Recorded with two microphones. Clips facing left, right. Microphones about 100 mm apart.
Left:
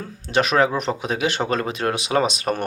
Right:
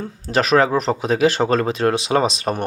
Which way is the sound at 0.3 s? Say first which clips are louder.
Right 2 dB; 35° right (ahead or behind).